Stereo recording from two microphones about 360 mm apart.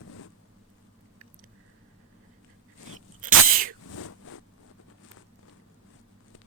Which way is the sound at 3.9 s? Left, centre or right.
Left.